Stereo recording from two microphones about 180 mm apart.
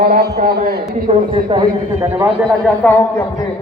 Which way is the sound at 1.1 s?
25° right (ahead or behind).